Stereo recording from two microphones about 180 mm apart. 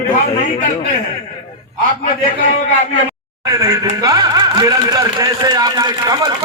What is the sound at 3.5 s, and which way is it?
A man's voice, 20° right (ahead or behind).